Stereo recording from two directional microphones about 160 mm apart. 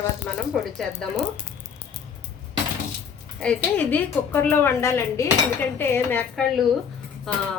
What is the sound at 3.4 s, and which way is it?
Speech, 5° left (ahead or behind).